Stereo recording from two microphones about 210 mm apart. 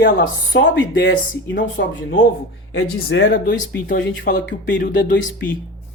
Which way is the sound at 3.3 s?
40° left (ahead or behind).